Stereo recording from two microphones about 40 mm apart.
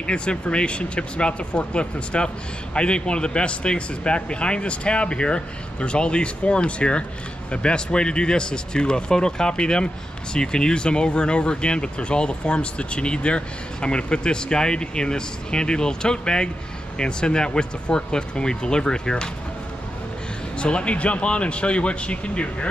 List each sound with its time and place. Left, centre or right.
0.0 s speech: left
20.5 s speech: left